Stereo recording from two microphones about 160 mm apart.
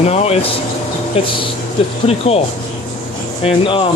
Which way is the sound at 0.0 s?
40° left (ahead or behind).